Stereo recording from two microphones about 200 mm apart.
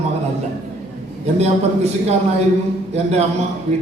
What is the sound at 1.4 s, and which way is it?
A man's voice, 30° right (ahead or behind).